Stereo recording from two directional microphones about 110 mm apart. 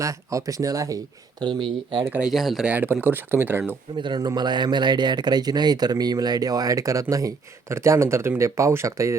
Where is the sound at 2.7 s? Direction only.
15° right (ahead or behind).